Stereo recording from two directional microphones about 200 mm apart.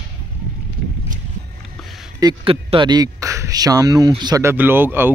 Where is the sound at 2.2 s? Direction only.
25° right (ahead or behind); by 5.1 s 10° right (ahead or behind).